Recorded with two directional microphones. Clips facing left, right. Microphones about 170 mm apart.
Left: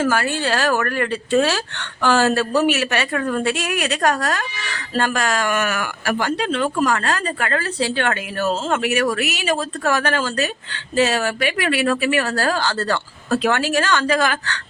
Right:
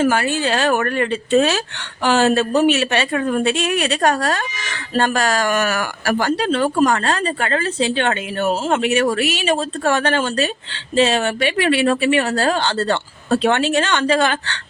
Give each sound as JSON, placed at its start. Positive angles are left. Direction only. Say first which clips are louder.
{"t": 0.0, "sound": "speech", "louder": "right 2 dB", "side_deg": -20}